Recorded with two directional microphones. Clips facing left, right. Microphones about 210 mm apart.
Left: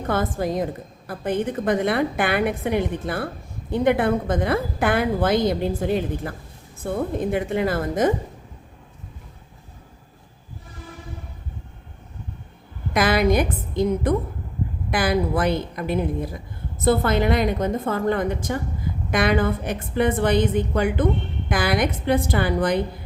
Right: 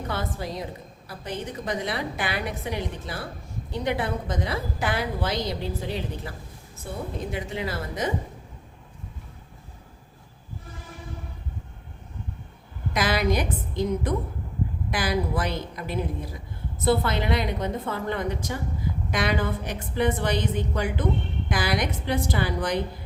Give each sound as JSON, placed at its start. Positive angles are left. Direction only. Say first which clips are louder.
{"t": 0.1, "sound": "a woman's voice", "louder": "left 10 dB", "side_deg": 50}
{"t": 12.9, "sound": "a woman's voice", "louder": "left 5 dB", "side_deg": 55}